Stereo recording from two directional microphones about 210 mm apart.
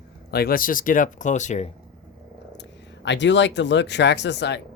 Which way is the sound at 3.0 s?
60° left (ahead or behind).